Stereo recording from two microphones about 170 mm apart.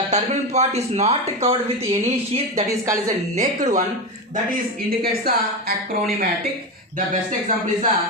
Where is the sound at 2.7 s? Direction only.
20° right (ahead or behind).